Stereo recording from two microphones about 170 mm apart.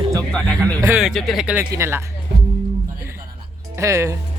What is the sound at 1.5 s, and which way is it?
Speech, 15° right (ahead or behind).